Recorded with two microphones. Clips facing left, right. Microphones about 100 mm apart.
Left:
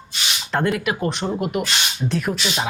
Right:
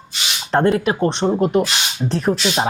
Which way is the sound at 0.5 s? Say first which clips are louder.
Right 6 dB; 35° right (ahead or behind).